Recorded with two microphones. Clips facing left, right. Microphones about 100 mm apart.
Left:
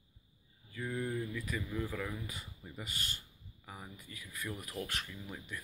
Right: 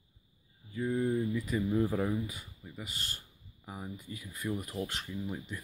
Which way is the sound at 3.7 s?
20° right (ahead or behind).